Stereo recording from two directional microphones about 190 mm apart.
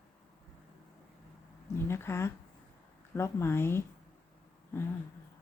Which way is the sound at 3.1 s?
15° left (ahead or behind).